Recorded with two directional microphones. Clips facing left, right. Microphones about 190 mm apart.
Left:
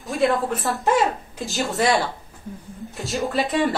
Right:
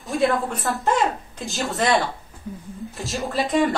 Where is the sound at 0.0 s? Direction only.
Centre (ahead or behind).